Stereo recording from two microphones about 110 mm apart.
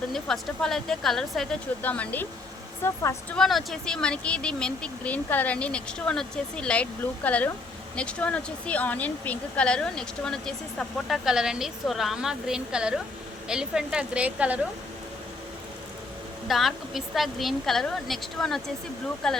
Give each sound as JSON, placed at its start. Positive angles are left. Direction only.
{"t": 0.1, "sound": "a woman's voice", "side_deg": 5}
{"t": 1.8, "sound": "speech", "side_deg": 15}
{"t": 2.8, "sound": "a woman's voice", "side_deg": 25}
{"t": 3.3, "sound": "speech", "side_deg": 5}
{"t": 11.3, "sound": "a woman's voice", "side_deg": -5}
{"t": 16.5, "sound": "a woman's voice", "side_deg": 0}